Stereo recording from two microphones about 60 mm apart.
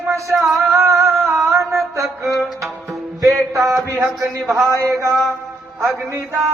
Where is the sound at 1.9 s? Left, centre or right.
Right.